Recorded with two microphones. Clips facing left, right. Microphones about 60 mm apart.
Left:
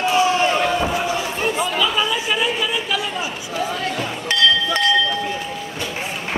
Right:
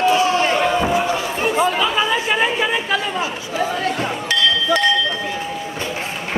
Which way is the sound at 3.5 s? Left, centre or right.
Right.